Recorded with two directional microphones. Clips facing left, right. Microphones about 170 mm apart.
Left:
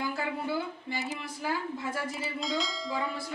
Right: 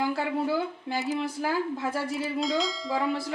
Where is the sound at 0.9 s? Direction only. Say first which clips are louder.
Right 7 dB; 90° right.